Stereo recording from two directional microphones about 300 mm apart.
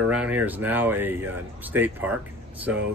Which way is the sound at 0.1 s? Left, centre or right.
Centre.